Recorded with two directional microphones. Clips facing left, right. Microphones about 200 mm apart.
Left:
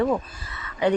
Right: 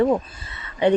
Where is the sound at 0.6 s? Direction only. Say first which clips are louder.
Right 3 dB; 25° right (ahead or behind).